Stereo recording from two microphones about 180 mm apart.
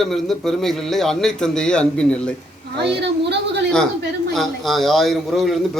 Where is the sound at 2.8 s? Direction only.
70° right (ahead or behind).